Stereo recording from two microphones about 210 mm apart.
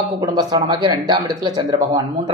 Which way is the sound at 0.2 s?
20° right (ahead or behind).